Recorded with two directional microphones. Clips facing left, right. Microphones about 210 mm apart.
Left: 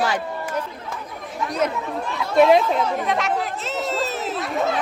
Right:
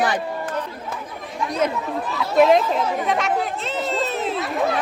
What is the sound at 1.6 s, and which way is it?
Speech, centre (ahead or behind).